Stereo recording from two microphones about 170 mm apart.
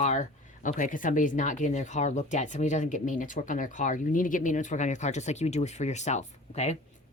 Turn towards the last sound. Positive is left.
turn(degrees=40)  # may be behind; listen again after turning